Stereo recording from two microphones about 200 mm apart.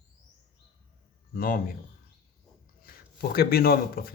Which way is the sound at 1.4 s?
45° left (ahead or behind).